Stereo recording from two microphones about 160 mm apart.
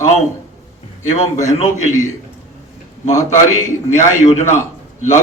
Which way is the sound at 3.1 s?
20° left (ahead or behind).